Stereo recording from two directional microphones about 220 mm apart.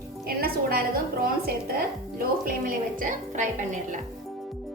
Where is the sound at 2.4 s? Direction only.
40° right (ahead or behind).